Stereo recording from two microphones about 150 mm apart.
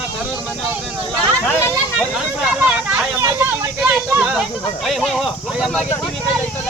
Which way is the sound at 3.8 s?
10° right (ahead or behind).